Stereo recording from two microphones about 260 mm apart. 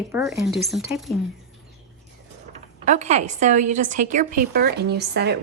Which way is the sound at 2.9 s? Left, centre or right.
Right.